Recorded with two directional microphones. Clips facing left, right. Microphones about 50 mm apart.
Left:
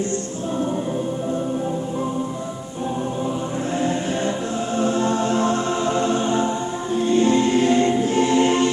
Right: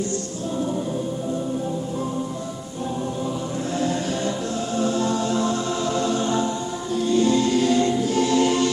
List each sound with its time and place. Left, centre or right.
4.7 s music: left